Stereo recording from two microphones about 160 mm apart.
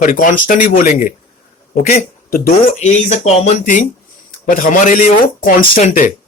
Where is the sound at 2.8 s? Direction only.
45° left (ahead or behind).